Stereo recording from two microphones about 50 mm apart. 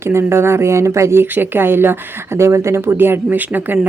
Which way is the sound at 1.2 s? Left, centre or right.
Right.